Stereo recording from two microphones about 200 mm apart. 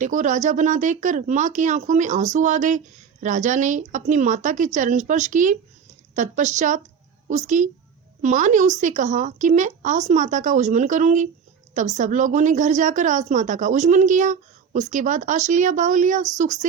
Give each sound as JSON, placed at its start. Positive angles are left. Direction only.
{"t": 0.0, "sound": "speech", "side_deg": -40}